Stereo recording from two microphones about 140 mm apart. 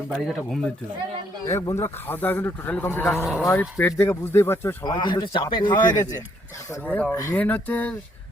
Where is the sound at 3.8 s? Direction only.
20° left (ahead or behind).